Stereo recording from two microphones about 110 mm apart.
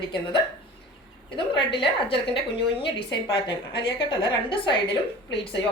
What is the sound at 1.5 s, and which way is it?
Speech, 50° left (ahead or behind).